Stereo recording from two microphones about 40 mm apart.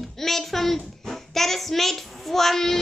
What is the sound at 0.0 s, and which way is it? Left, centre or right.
Child singing, centre.